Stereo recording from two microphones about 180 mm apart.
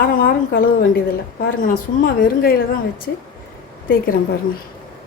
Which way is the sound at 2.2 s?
55° left (ahead or behind).